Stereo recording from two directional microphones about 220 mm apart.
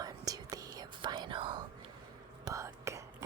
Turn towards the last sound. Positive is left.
turn(degrees=-15)  # may be behind; listen again after turning